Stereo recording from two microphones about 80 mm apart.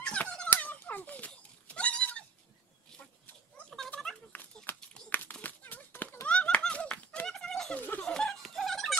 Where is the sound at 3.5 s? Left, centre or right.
Centre.